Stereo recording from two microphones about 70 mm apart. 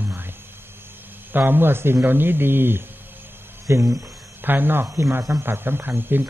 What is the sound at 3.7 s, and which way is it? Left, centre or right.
Speech, right.